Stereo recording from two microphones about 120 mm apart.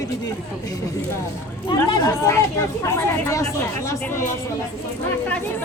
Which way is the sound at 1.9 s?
30° left (ahead or behind).